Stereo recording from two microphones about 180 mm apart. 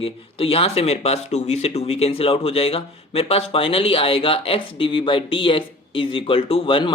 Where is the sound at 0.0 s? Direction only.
30° left (ahead or behind).